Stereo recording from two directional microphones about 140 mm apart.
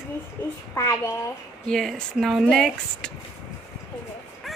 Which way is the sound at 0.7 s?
20° left (ahead or behind).